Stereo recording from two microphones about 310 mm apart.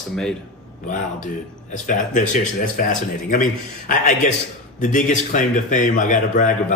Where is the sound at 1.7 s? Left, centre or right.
Left.